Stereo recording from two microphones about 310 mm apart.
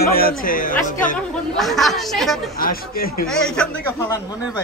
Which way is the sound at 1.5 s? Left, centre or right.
Centre.